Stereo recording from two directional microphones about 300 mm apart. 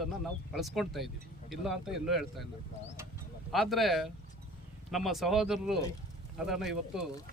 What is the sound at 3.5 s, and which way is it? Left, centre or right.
Speech, centre.